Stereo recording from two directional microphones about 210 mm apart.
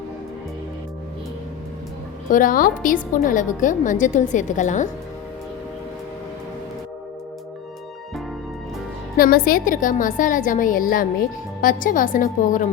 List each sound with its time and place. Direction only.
2.3 s a woman's voice: 40° left (ahead or behind)
9.1 s a woman's voice: 45° left (ahead or behind)